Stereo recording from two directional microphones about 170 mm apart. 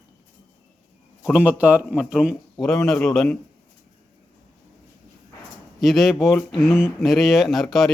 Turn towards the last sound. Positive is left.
turn(degrees=0)  # may be behind; listen again after turning